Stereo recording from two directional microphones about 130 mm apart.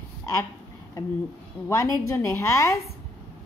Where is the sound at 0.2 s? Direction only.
25° left (ahead or behind).